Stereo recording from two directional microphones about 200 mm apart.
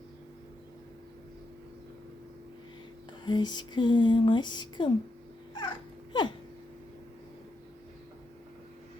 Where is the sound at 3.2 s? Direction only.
20° left (ahead or behind).